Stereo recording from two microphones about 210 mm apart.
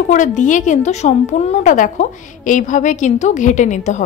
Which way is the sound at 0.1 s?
35° left (ahead or behind).